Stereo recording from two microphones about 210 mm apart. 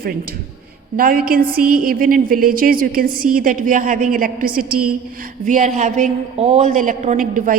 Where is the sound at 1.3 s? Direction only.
45° right (ahead or behind).